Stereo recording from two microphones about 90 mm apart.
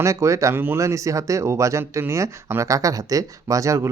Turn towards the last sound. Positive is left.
turn(degrees=-35)  # may be behind; listen again after turning